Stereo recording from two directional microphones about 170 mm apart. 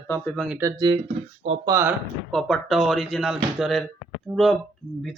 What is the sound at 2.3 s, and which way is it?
Speech, centre (ahead or behind).